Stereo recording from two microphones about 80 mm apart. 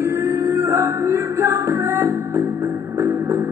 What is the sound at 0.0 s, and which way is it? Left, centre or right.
Music, right.